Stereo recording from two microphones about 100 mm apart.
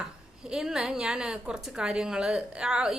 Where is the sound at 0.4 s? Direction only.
5° right (ahead or behind).